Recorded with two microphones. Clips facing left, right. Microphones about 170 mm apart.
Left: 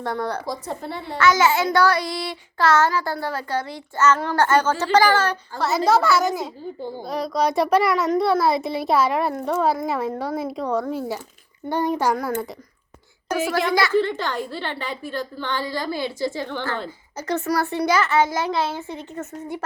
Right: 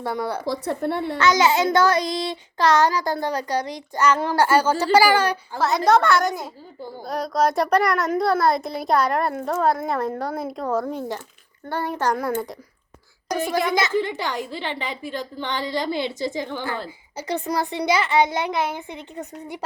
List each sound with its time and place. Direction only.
0.0 s a woman's voice: 10° right (ahead or behind)
0.4 s speech: 65° right (ahead or behind)
1.2 s a woman's voice: 20° right (ahead or behind)
5.5 s a child's voice: centre (ahead or behind)
11.7 s a child's voice: 15° left (ahead or behind)
12.1 s a child's voice: centre (ahead or behind)
13.7 s a woman's voice: 20° right (ahead or behind)